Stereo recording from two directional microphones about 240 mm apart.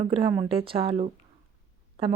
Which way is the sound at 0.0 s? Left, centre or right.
Right.